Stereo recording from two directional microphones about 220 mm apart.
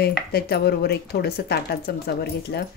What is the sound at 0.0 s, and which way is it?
Speech, 45° left (ahead or behind).